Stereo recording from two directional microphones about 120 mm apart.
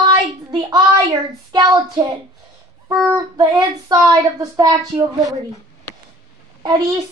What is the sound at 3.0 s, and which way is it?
Child singing, 30° right (ahead or behind).